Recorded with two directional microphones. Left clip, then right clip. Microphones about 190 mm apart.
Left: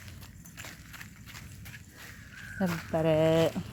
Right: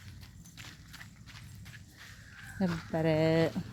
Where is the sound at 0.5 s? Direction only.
50° left (ahead or behind).